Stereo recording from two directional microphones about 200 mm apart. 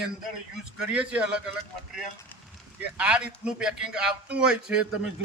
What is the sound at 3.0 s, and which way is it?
Speech, 5° right (ahead or behind).